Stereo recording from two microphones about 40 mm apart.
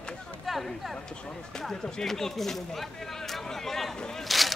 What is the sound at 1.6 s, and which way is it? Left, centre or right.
A man's voice, centre.